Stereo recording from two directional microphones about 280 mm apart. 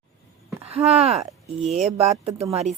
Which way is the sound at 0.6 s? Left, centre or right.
Right.